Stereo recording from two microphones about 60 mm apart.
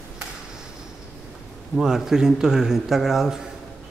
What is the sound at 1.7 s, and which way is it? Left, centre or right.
Speech, centre.